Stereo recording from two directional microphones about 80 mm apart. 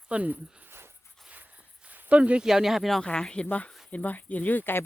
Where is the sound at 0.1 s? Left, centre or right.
Centre.